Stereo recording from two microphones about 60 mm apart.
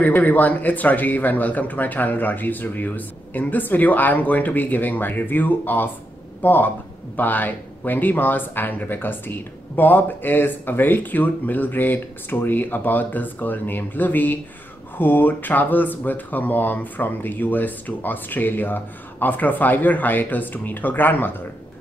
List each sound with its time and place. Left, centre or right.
0.0 s speech: left